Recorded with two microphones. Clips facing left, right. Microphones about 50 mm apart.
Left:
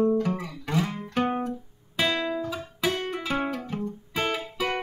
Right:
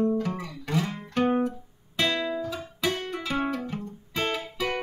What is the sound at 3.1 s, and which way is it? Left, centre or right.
Music, centre.